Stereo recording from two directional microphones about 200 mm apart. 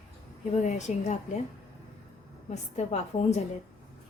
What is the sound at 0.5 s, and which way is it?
Speech, 35° left (ahead or behind).